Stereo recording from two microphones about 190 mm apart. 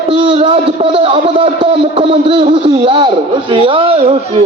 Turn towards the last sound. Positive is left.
turn(degrees=-30)  # may be behind; listen again after turning